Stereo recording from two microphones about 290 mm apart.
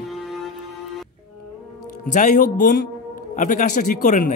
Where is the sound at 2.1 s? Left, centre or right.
Left.